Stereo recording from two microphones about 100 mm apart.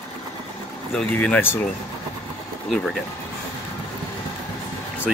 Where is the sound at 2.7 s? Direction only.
5° left (ahead or behind).